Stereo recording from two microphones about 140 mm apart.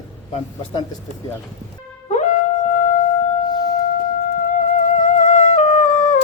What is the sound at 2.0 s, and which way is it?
Wind instrument, 60° left (ahead or behind).